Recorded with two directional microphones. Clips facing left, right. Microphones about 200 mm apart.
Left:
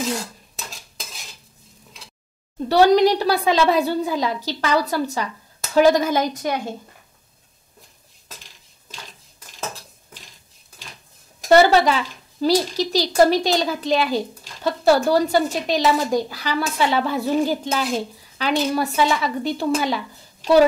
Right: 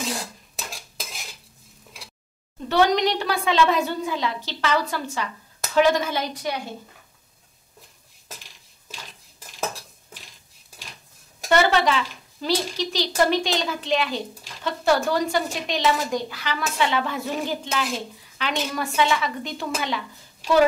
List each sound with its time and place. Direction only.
2.7 s a woman's voice: 35° left (ahead or behind)
11.4 s speech: 35° left (ahead or behind)